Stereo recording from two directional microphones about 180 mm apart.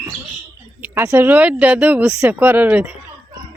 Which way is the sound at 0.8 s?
15° right (ahead or behind).